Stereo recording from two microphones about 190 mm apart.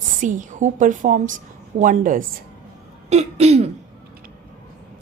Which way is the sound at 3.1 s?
35° right (ahead or behind).